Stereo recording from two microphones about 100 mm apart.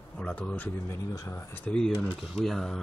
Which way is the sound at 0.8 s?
30° left (ahead or behind).